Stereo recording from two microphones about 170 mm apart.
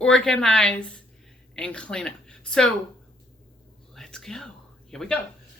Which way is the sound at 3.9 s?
5° left (ahead or behind).